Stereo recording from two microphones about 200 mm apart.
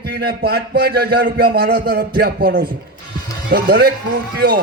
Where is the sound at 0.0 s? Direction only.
50° right (ahead or behind).